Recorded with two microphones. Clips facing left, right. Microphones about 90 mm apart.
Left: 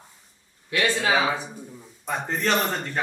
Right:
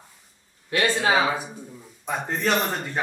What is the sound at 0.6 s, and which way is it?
Speech, 35° right (ahead or behind).